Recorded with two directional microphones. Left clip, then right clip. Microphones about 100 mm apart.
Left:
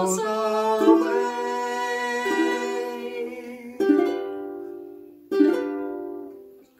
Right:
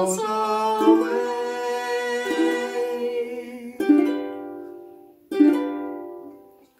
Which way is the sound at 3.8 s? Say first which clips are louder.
Right 1 dB; 15° right (ahead or behind).